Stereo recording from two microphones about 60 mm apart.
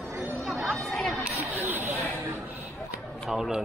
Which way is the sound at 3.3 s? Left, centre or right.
Centre.